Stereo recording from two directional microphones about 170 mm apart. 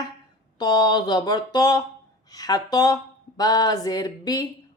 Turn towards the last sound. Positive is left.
turn(degrees=20)  # may be behind; listen again after turning